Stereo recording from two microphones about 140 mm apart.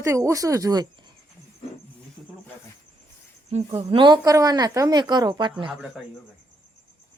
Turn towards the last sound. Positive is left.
turn(degrees=-30)  # may be behind; listen again after turning